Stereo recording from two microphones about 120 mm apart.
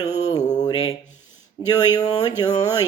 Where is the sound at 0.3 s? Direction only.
35° left (ahead or behind).